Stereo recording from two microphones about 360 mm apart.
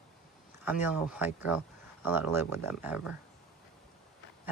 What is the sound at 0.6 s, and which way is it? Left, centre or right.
Speech, centre.